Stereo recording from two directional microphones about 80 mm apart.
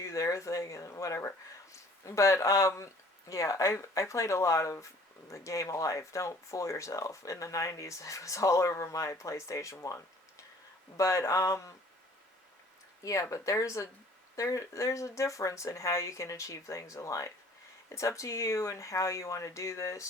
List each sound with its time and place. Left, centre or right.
0.0 s speech: left
13.0 s speech: left